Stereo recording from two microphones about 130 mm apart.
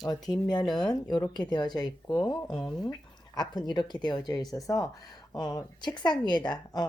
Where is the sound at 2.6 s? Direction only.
Centre (ahead or behind).